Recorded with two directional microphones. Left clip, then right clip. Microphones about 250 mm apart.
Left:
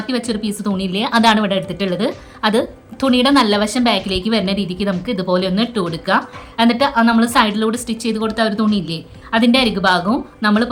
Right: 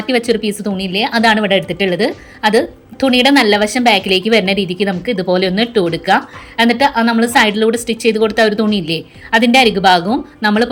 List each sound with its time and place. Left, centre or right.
0.0 s speech: centre